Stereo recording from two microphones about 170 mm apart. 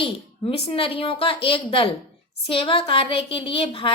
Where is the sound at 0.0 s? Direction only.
35° left (ahead or behind).